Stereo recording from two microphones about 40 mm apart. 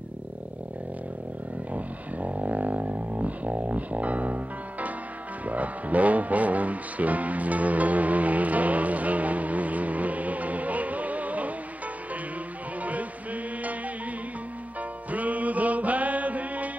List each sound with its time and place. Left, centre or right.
1.7 s didgeridoo: right
5.4 s music: right
12.8 s music: right